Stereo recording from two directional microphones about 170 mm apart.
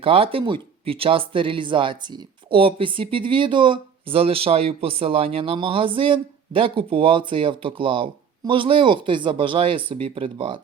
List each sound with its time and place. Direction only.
0.0 s speech: 35° right (ahead or behind)